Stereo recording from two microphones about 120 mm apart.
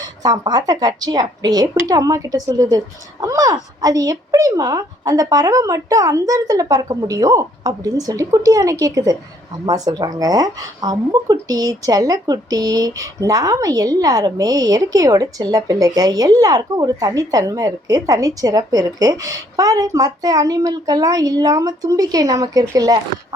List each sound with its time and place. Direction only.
0.0 s a woman's voice: 35° right (ahead or behind)